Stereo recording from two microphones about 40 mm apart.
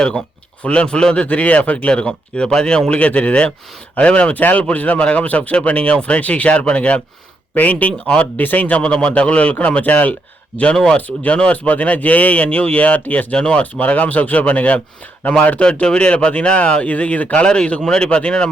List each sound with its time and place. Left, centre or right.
0.0 s speech: left
1.9 s speech: left
4.4 s speech: left
8.4 s speech: left
8.7 s speech: left
13.3 s speech: left
13.6 s speech: left
17.4 s speech: left